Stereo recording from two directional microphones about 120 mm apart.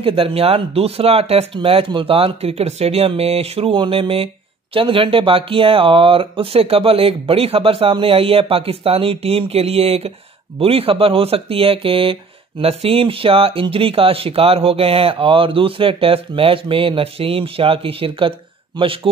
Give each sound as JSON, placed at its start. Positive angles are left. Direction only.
{"t": 0.0, "sound": "speech", "side_deg": -50}